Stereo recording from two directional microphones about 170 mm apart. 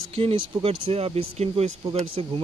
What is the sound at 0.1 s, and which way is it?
Speech, 35° right (ahead or behind).